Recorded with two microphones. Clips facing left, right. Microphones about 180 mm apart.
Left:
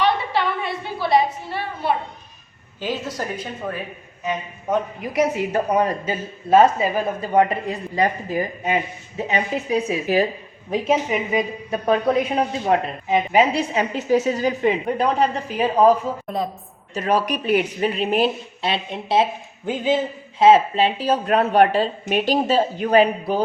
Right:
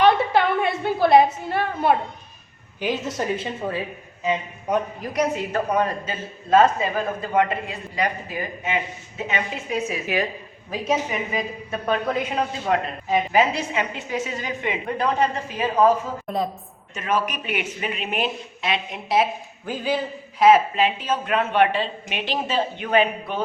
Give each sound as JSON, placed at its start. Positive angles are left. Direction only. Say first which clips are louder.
{"t": 0.0, "sound": "a sound", "louder": "right 3 dB", "side_deg": -50}
{"t": 2.8, "sound": "a woman's voice", "louder": "right 1 dB", "side_deg": -15}
{"t": 3.2, "sound": "a woman's voice", "louder": "right 3 dB", "side_deg": -25}
{"t": 4.9, "sound": "a woman's voice", "louder": "left 3 dB", "side_deg": 5}
{"t": 6.7, "sound": "a woman's voice", "louder": "left 3 dB", "side_deg": 30}
{"t": 16.2, "sound": "a woman's voice", "louder": "even", "side_deg": 0}
{"t": 16.9, "sound": "speech", "louder": "left 4 dB", "side_deg": 35}